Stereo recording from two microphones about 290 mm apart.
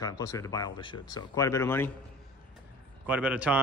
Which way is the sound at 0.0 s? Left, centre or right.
Centre.